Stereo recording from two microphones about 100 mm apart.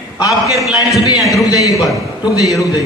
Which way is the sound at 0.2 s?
35° left (ahead or behind).